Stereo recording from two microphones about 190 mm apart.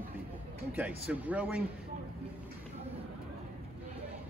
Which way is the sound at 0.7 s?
5° right (ahead or behind).